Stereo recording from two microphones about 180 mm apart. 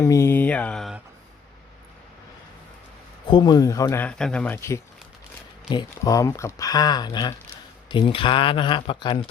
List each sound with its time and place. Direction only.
0.0 s speech: 15° left (ahead or behind); by 1.0 s centre (ahead or behind)
3.2 s speech: 25° left (ahead or behind)
4.0 s speech: 5° left (ahead or behind); by 9.1 s 25° left (ahead or behind)